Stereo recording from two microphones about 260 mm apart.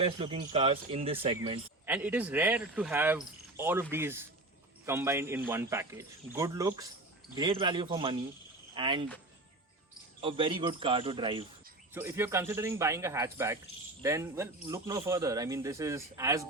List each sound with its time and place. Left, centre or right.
0.0 s speech: right
1.9 s speech: centre
10.2 s speech: centre
11.9 s speech: centre